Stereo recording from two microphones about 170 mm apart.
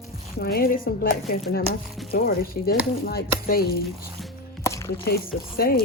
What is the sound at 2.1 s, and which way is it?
Speech, 60° left (ahead or behind).